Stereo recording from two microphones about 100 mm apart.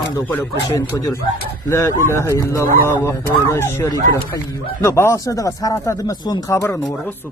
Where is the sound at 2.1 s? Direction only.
30° left (ahead or behind).